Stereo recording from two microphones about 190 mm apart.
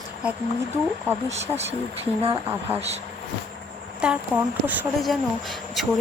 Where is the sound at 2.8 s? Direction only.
35° right (ahead or behind).